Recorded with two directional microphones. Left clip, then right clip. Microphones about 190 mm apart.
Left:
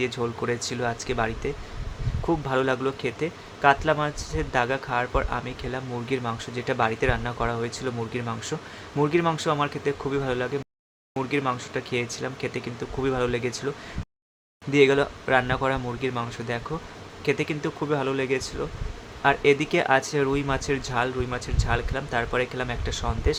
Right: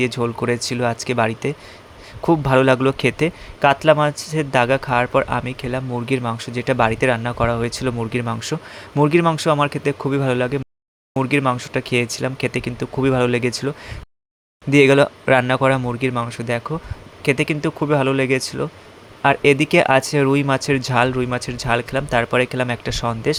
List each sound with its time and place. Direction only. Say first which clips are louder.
0.0 s speech: right 6 dB; 35° right (ahead or behind)